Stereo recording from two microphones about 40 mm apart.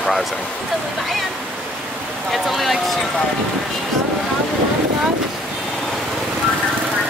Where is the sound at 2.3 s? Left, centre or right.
Centre.